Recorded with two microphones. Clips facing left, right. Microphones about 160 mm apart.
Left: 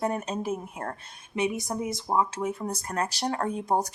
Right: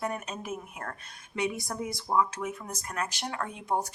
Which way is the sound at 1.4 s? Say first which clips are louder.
Left 4 dB; 20° left (ahead or behind).